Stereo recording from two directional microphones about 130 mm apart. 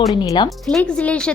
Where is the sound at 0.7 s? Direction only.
10° left (ahead or behind).